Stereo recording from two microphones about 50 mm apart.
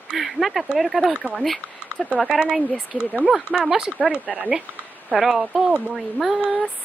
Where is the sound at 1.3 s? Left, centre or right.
Centre.